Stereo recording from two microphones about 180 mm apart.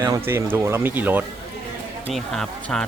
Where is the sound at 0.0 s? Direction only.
15° right (ahead or behind).